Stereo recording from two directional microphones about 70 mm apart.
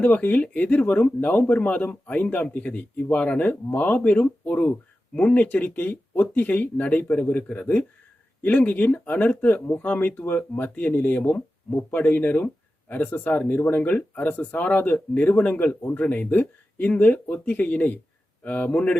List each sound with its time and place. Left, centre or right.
0.0 s speech: left